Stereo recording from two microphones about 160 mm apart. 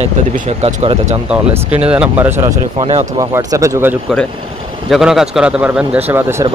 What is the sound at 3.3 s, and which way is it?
Speech, 20° right (ahead or behind).